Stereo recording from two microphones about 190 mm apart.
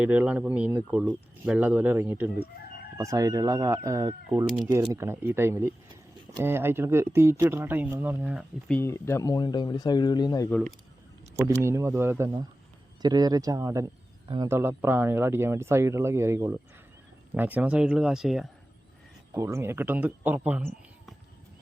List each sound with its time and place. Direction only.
0.0 s speech: 5° right (ahead or behind)
8.6 s speech: 10° left (ahead or behind)
11.3 s speech: 15° right (ahead or behind)
19.3 s speech: 15° right (ahead or behind)